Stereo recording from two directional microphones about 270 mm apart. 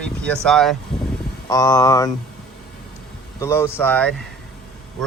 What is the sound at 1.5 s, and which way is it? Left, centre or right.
Speech, centre.